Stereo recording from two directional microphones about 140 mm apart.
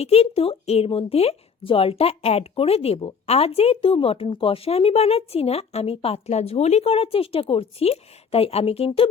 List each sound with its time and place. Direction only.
0.0 s speech: 45° left (ahead or behind)